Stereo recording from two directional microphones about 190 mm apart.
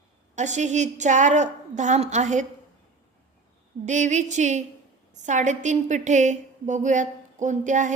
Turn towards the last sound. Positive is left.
turn(degrees=-40)  # may be behind; listen again after turning